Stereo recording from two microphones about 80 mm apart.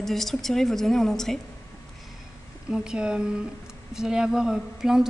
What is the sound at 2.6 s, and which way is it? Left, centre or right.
Speech, centre.